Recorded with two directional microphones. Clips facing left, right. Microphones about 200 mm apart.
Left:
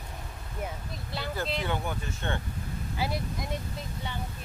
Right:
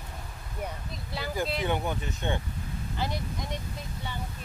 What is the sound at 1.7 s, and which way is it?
Speech, 20° right (ahead or behind).